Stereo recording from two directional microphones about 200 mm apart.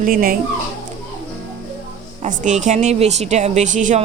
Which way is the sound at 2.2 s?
35° right (ahead or behind).